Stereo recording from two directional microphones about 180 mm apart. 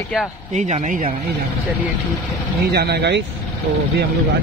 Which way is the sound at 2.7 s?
65° right (ahead or behind).